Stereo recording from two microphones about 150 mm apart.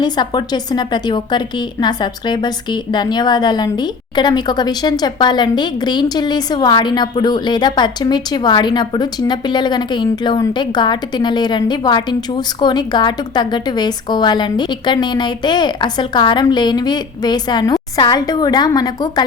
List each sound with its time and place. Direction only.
0.0 s a woman's voice: 30° left (ahead or behind)